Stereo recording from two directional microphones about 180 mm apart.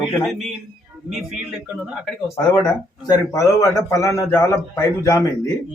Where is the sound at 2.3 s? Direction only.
20° left (ahead or behind).